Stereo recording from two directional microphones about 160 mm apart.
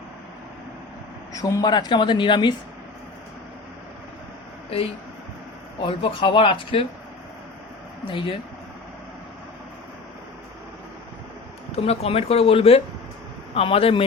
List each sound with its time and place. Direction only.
1.3 s speech: 20° left (ahead or behind)
5.8 s speech: 30° left (ahead or behind)
8.0 s speech: 30° left (ahead or behind)
11.7 s speech: 40° left (ahead or behind)